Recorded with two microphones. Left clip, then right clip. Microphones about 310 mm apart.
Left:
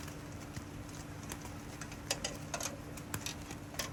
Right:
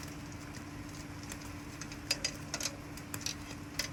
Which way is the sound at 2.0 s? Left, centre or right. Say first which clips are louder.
Right 3 dB; centre.